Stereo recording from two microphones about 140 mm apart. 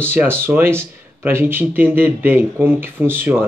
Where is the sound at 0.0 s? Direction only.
15° right (ahead or behind).